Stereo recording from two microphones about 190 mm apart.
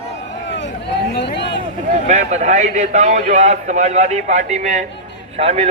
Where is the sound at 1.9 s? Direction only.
40° right (ahead or behind).